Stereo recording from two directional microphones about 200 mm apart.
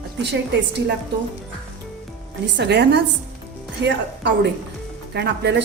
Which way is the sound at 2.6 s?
55° right (ahead or behind).